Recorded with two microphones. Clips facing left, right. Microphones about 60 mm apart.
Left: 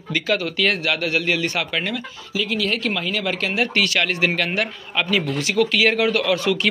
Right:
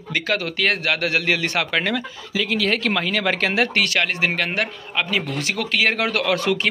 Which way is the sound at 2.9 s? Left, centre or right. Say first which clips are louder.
Right 3 dB; right.